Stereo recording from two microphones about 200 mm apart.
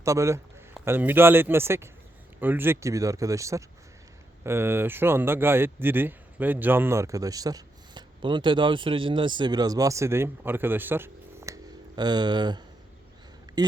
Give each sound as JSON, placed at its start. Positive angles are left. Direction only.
{"t": 0.0, "sound": "speech", "side_deg": -15}